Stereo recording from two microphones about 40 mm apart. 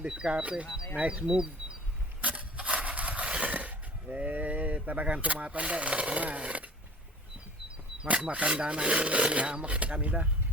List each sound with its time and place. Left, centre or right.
0.0 s speech: right
1.2 s speech: centre
2.2 s a sound: right
5.0 s speech: right
8.0 s speech: right